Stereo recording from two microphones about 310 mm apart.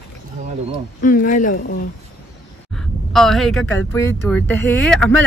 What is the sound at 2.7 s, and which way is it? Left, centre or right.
Speech, centre.